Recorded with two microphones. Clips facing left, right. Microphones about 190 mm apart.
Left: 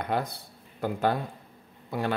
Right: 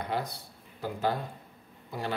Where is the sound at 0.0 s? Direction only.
55° left (ahead or behind).